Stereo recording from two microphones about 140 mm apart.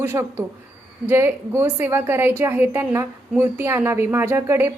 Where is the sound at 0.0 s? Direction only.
20° right (ahead or behind).